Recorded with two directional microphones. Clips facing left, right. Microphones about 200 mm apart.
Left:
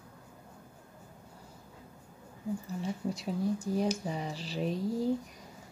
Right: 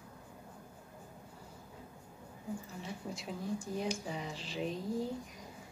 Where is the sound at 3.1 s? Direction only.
40° left (ahead or behind).